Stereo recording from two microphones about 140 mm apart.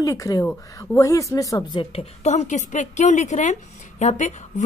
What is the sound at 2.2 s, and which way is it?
A woman's voice, 55° left (ahead or behind).